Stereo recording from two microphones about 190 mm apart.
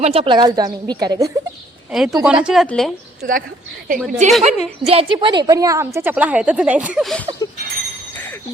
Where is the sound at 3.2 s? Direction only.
45° right (ahead or behind).